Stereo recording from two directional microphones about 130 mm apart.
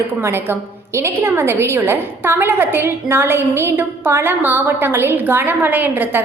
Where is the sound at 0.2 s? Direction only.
20° right (ahead or behind).